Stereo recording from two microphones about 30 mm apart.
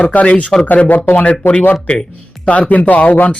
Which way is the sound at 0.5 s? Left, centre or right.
Left.